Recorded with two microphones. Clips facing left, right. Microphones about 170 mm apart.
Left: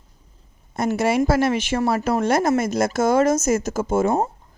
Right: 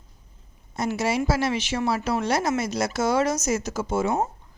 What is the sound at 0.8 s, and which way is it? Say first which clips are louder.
Speech: left 5 dB; 55° left (ahead or behind).